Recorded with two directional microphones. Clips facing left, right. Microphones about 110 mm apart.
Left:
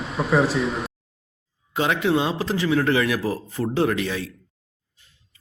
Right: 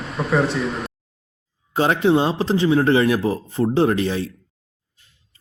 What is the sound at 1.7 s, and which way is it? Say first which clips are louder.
A man's voice: right 4 dB; 35° right (ahead or behind).